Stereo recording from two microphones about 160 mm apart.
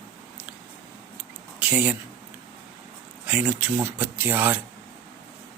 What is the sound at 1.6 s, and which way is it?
Speech, 10° right (ahead or behind).